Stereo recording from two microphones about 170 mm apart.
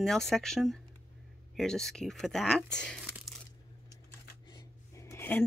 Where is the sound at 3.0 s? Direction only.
5° right (ahead or behind).